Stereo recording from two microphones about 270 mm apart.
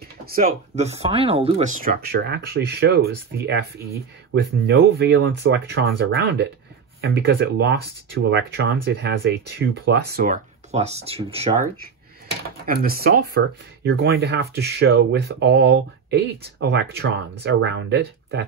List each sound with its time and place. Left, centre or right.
0.2 s speech: right
12.6 s speech: right